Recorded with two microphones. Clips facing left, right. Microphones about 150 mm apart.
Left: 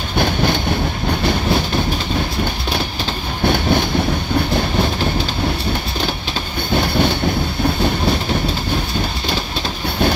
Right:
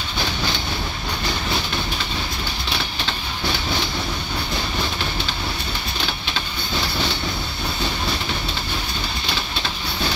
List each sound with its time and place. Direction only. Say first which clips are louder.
0.2 s train: left 9 dB; 55° left (ahead or behind)
3.4 s train: left 10 dB; 55° left (ahead or behind)
6.7 s train: left 9 dB; 55° left (ahead or behind)